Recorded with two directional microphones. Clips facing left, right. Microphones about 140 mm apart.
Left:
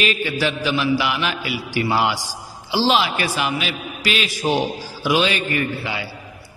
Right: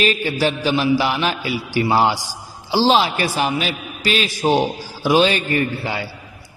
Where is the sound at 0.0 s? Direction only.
35° right (ahead or behind).